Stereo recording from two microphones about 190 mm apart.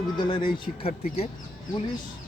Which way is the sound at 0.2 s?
25° left (ahead or behind).